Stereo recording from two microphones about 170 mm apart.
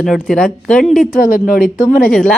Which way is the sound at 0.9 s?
55° left (ahead or behind).